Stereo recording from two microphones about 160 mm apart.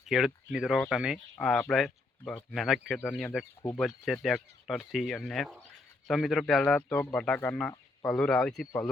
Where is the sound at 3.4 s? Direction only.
15° left (ahead or behind).